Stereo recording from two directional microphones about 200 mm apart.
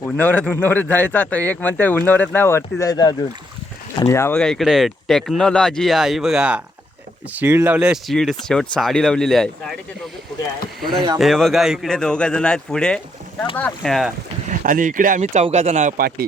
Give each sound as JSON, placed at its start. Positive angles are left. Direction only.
{"t": 0.0, "sound": "speech", "side_deg": 10}
{"t": 11.2, "sound": "speech", "side_deg": 0}
{"t": 14.4, "sound": "speech", "side_deg": -40}